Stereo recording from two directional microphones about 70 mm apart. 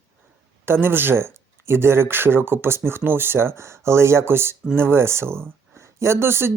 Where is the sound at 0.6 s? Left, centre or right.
Right.